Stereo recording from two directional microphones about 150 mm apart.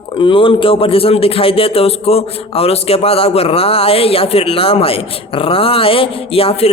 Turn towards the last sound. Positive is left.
turn(degrees=40)  # may be behind; listen again after turning